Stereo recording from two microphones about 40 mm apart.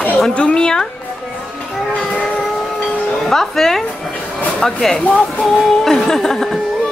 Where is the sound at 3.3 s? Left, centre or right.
Centre.